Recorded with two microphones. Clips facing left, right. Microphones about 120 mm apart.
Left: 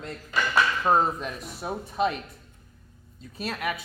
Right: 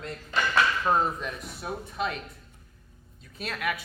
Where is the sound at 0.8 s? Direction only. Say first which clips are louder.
Left 3 dB; 25° left (ahead or behind).